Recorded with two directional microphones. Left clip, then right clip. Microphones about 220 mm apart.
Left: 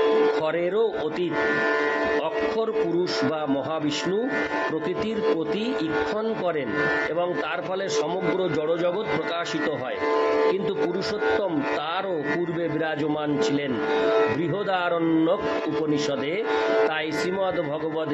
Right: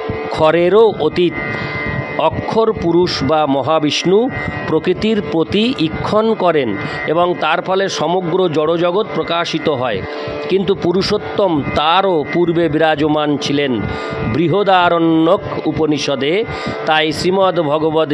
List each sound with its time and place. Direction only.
0.4 s speech: 50° right (ahead or behind)
10.5 s speech: 50° right (ahead or behind)